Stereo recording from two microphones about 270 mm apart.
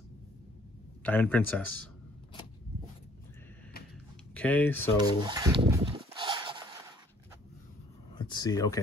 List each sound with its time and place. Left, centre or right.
1.0 s speech: centre
4.3 s speech: centre
4.9 s a sound: centre
8.1 s speech: centre